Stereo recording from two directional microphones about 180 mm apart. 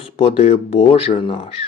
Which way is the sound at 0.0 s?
35° left (ahead or behind).